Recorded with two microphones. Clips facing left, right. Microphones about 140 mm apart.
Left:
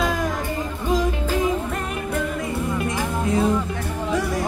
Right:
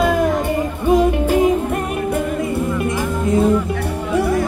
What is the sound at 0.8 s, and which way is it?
Music, 60° right (ahead or behind).